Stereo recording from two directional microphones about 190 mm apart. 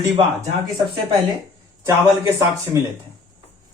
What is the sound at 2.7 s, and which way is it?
Speech, 15° right (ahead or behind).